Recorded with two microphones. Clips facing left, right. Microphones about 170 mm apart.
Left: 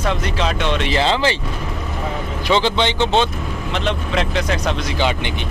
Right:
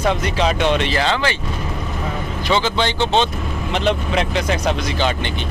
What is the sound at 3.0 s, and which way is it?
Speech, 15° right (ahead or behind).